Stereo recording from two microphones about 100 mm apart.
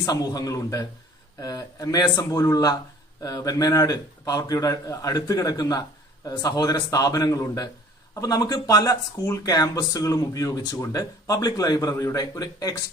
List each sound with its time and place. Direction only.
0.0 s speech: 40° left (ahead or behind)